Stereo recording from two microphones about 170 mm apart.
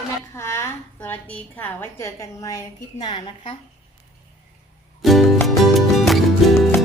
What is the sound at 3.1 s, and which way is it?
Speech, 40° left (ahead or behind).